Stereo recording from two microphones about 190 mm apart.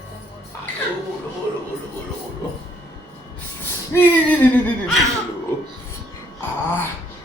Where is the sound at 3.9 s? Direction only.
15° left (ahead or behind).